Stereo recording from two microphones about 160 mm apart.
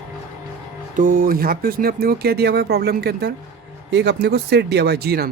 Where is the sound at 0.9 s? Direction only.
55° right (ahead or behind); by 5.3 s 80° right.